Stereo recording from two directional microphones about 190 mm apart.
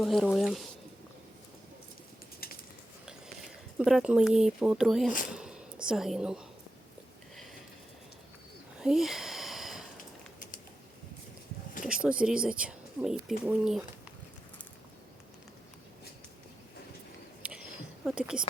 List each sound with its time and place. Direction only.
0.0 s speech: centre (ahead or behind)
2.4 s bird: 50° left (ahead or behind)
3.8 s speech: 5° right (ahead or behind)
5.3 s a sound: 5° right (ahead or behind)
8.8 s a sound: centre (ahead or behind)
12.2 s speech: 5° right (ahead or behind)
18.0 s speech: 5° right (ahead or behind)